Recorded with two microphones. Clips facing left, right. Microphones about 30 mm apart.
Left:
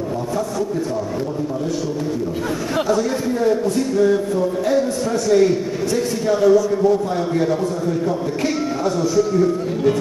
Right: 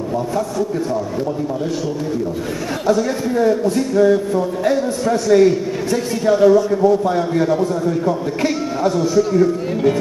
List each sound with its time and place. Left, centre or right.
2.9 s a man's voice: centre
8.4 s a man's voice: right
9.1 s a man's voice: centre